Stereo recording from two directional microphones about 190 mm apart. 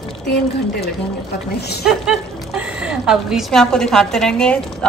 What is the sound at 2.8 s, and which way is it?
A woman's voice, 5° right (ahead or behind).